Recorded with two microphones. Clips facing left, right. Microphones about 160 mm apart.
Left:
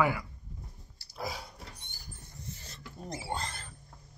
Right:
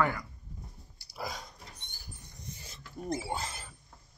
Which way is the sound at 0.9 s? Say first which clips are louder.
Even; 10° right (ahead or behind).